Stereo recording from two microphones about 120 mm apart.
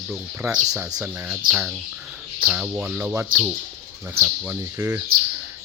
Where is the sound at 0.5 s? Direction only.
25° right (ahead or behind).